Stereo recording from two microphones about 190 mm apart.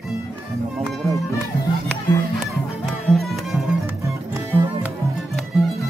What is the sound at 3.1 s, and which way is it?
Music, centre (ahead or behind).